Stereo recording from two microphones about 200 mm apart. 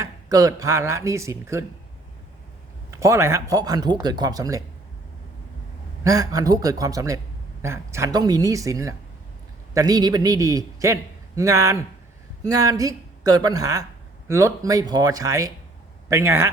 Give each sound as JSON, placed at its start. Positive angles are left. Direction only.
{"t": 0.0, "sound": "a man's voice", "side_deg": -15}
{"t": 2.9, "sound": "a man's voice", "side_deg": -15}
{"t": 6.1, "sound": "a man's voice", "side_deg": -15}